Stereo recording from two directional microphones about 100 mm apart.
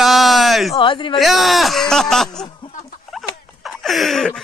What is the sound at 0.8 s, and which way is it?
Speech, 55° left (ahead or behind).